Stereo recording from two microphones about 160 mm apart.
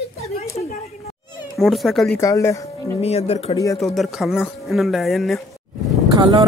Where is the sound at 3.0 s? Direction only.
40° left (ahead or behind).